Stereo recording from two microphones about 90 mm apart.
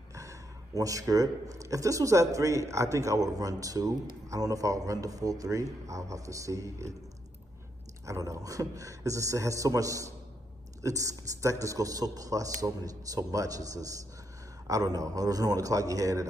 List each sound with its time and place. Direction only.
0.1 s speech: 35° right (ahead or behind)
8.0 s speech: 35° right (ahead or behind)